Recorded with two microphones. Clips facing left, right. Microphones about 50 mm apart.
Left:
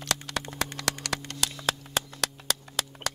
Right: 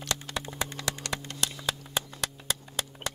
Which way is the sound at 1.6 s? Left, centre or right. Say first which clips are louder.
Left 5 dB; left.